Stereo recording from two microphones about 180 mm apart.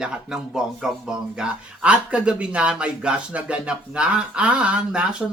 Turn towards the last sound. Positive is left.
turn(degrees=-5)  # may be behind; listen again after turning